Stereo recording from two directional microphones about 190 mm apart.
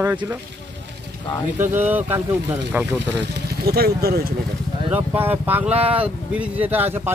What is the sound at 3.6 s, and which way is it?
Speech, 55° right (ahead or behind).